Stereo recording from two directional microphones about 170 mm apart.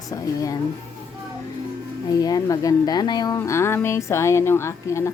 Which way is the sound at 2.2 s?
20° left (ahead or behind).